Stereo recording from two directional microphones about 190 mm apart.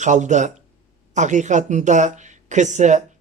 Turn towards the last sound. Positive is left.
turn(degrees=-40)  # may be behind; listen again after turning